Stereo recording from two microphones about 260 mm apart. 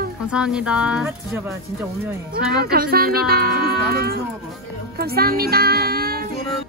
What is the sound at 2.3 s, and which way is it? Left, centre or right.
Speech, right.